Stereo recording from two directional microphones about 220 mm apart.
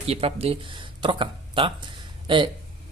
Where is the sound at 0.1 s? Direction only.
25° right (ahead or behind).